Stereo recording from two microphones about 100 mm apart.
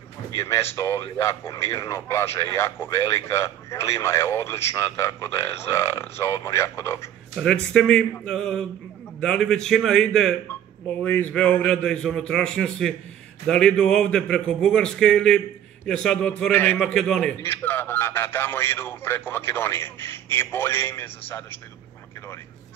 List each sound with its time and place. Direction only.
0.4 s speech: 30° left (ahead or behind)
7.3 s a man's voice: 10° left (ahead or behind)
11.1 s speech: 20° left (ahead or behind)
16.8 s speech: 5° left (ahead or behind)
17.4 s speech: 20° left (ahead or behind)